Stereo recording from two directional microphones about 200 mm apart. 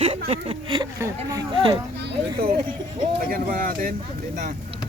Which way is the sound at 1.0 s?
15° right (ahead or behind).